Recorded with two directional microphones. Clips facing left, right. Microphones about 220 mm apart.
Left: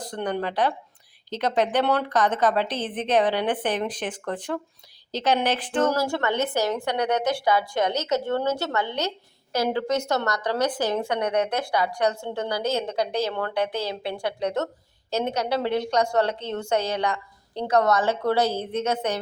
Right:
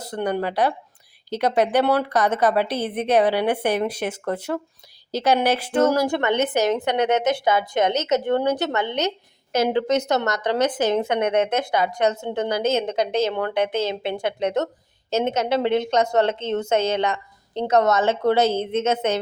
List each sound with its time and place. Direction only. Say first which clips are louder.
0.0 s a woman's voice: right 3 dB; 10° right (ahead or behind)